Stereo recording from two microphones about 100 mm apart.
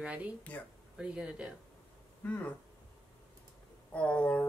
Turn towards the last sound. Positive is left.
turn(degrees=15)  # may be behind; listen again after turning